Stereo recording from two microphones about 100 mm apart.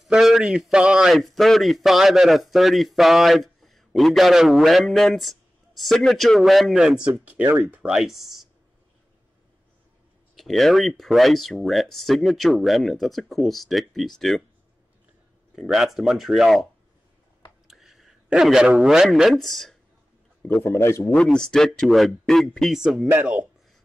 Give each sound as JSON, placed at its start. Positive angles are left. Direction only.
{"t": 0.0, "sound": "a man's voice", "side_deg": -5}
{"t": 7.9, "sound": "a man's voice", "side_deg": -5}
{"t": 10.3, "sound": "a man's voice", "side_deg": 0}
{"t": 15.5, "sound": "a man's voice", "side_deg": -5}
{"t": 17.6, "sound": "a man's voice", "side_deg": -5}
{"t": 20.6, "sound": "a man's voice", "side_deg": 25}
{"t": 21.1, "sound": "a man's voice", "side_deg": 5}
{"t": 23.0, "sound": "speech", "side_deg": -20}